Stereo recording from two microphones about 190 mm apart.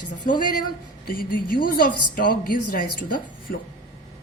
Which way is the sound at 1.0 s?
50° left (ahead or behind).